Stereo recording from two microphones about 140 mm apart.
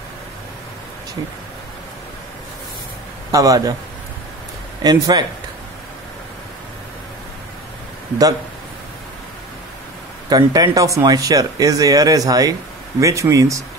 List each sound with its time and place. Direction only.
3.3 s speech: 25° right (ahead or behind)
4.8 s speech: 30° right (ahead or behind)
10.3 s speech: 30° right (ahead or behind)